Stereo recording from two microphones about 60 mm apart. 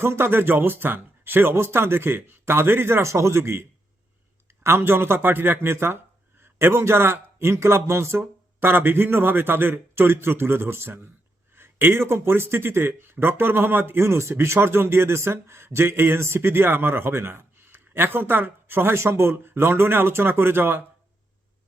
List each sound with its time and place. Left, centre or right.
0.0 s speech: right